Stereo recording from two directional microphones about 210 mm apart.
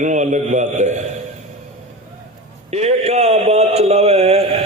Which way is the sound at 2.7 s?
30° right (ahead or behind).